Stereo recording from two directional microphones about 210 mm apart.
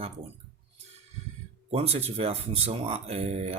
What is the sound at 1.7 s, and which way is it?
Speech, 30° right (ahead or behind).